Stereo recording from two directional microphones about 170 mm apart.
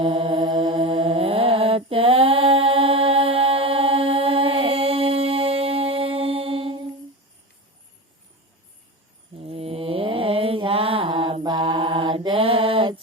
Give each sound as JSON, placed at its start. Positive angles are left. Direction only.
{"t": 0.0, "sound": "mantra", "side_deg": -30}
{"t": 9.3, "sound": "mantra", "side_deg": -35}